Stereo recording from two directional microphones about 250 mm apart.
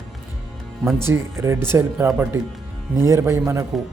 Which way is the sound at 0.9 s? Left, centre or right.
Centre.